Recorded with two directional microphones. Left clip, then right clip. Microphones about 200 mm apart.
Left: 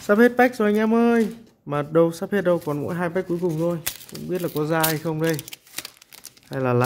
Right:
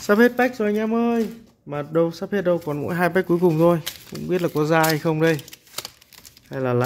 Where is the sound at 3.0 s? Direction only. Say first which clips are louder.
Right 9 dB; 20° right (ahead or behind).